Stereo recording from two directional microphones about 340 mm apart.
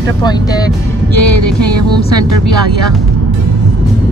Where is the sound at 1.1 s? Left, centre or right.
Right.